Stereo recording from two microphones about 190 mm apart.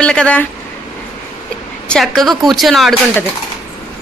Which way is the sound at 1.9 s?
Centre (ahead or behind).